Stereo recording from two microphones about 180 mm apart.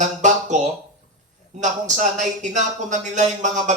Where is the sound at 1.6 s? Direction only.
40° right (ahead or behind).